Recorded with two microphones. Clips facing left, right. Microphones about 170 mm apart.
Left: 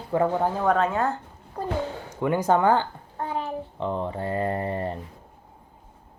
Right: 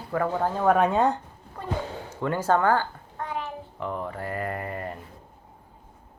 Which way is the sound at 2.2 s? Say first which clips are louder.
Left 2 dB; 15° left (ahead or behind).